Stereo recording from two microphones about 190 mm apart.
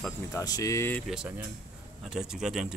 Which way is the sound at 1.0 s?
5° right (ahead or behind).